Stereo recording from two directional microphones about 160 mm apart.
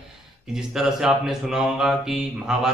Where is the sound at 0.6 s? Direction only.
5° right (ahead or behind).